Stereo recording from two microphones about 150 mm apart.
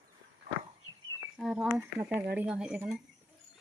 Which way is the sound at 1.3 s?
5° right (ahead or behind).